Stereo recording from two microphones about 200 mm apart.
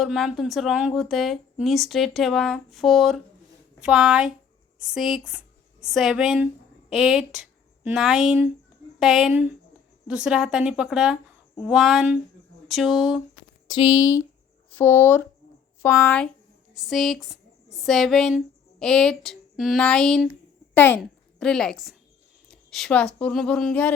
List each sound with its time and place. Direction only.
0.0 s speech: centre (ahead or behind)
13.7 s a woman's voice: 20° left (ahead or behind); by 23.9 s 5° left (ahead or behind)